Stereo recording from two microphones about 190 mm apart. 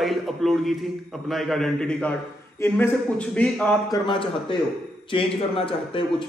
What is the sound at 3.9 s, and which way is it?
A man's voice, 25° left (ahead or behind).